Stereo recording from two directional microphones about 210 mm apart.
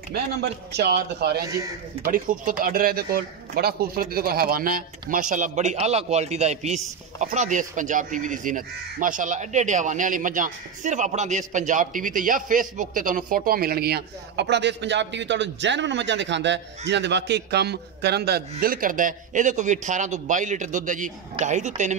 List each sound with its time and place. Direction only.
0.1 s speech: 50° right (ahead or behind); by 21.9 s 35° right (ahead or behind)